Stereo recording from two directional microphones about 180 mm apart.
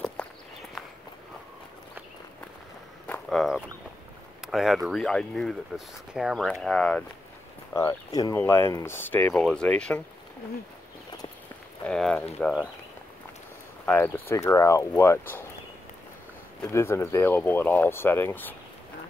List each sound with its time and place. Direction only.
0.2 s walk: 5° left (ahead or behind)
3.1 s a sound: centre (ahead or behind)
4.5 s speech: centre (ahead or behind)
7.7 s speech: 20° left (ahead or behind)
11.8 s a sound: 5° left (ahead or behind)
12.4 s speech: 5° left (ahead or behind)
13.8 s speech: 10° left (ahead or behind)
16.6 s speech: 15° left (ahead or behind)